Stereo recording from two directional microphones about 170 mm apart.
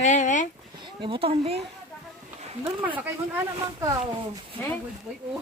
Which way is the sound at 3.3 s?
20° right (ahead or behind).